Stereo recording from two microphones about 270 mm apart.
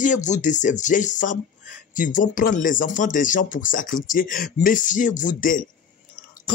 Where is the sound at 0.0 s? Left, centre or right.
Left.